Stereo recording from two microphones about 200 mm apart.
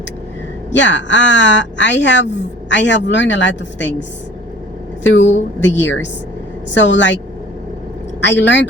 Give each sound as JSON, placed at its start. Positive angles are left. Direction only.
{"t": 0.7, "sound": "a woman's voice", "side_deg": 65}
{"t": 5.0, "sound": "a woman's voice", "side_deg": 65}
{"t": 8.2, "sound": "a woman's voice", "side_deg": 60}